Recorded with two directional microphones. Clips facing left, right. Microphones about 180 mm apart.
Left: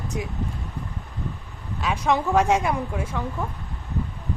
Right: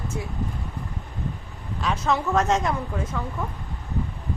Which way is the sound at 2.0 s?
15° left (ahead or behind).